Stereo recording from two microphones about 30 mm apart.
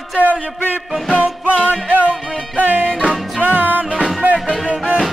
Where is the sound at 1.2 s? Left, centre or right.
Right.